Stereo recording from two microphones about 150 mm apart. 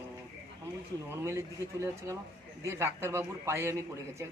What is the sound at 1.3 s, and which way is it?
A man's voice, 20° right (ahead or behind).